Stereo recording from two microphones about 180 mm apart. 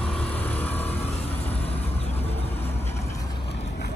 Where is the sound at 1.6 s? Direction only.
35° left (ahead or behind).